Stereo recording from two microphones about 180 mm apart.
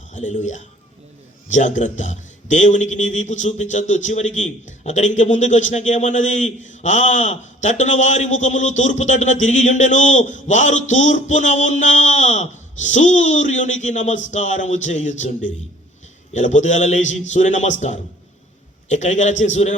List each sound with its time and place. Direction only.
0.1 s a man's voice: 40° left (ahead or behind)